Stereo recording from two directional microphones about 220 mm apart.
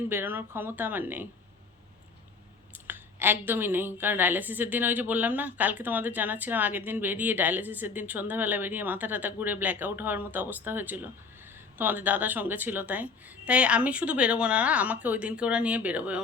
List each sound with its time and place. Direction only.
0.1 s a woman's voice: 10° right (ahead or behind)
2.7 s a woman's voice: 10° right (ahead or behind)